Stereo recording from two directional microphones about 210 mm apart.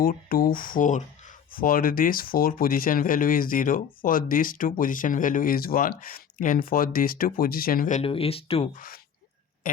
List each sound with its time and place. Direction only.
0.0 s speech: 40° left (ahead or behind); by 8.7 s 25° left (ahead or behind)
8.7 s speech: 40° left (ahead or behind)